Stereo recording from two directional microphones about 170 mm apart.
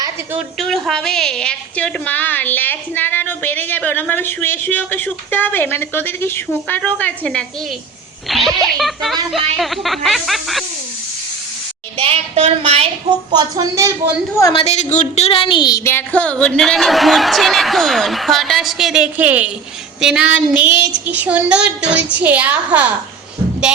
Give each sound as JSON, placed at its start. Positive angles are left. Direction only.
{"t": 0.3, "sound": "a woman's voice", "side_deg": 0}
{"t": 11.9, "sound": "speech", "side_deg": -35}
{"t": 13.3, "sound": "speech", "side_deg": -25}
{"t": 14.5, "sound": "a woman's voice", "side_deg": 40}